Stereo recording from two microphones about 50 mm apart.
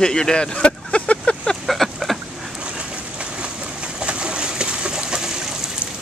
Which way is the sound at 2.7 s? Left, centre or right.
Centre.